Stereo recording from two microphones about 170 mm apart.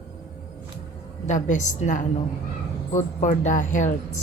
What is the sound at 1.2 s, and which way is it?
Speech, 45° left (ahead or behind).